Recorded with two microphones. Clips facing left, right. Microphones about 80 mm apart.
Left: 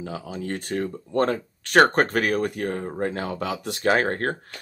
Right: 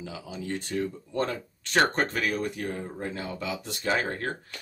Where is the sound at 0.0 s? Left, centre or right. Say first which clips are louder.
Left 5 dB; left.